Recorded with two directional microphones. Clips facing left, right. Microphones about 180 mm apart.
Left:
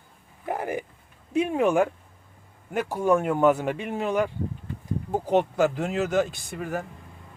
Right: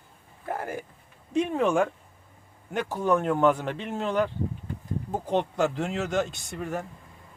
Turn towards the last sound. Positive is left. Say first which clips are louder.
# left 1 dB
turn(degrees=0)  # may be behind; listen again after turning